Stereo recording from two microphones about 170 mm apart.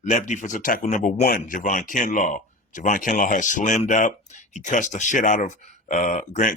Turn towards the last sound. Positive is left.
turn(degrees=50)  # may be behind; listen again after turning